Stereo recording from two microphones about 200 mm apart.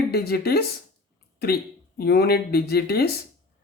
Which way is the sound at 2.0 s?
50° left (ahead or behind).